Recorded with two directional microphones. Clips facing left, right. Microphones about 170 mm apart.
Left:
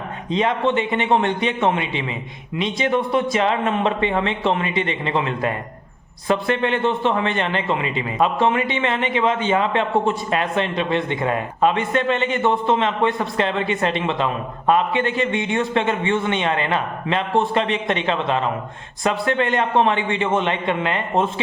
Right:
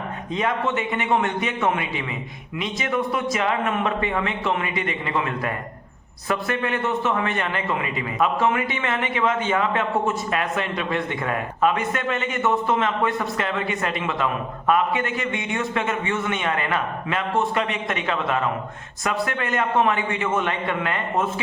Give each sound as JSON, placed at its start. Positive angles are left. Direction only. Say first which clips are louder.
{"t": 0.3, "sound": "a man's voice", "louder": "left 5 dB", "side_deg": 25}